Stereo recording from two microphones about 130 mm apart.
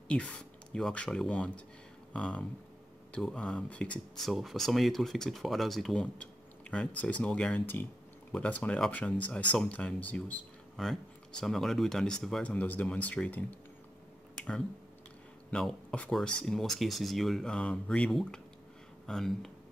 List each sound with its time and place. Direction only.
0.1 s speech: 5° left (ahead or behind)
14.3 s a sound: 5° left (ahead or behind)
15.5 s speech: 5° left (ahead or behind)